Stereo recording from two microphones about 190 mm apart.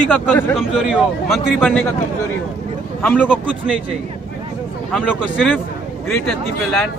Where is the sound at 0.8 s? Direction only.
5° right (ahead or behind).